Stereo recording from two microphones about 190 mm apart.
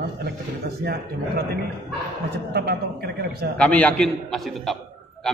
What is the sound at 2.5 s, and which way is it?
A man's voice, 60° right (ahead or behind).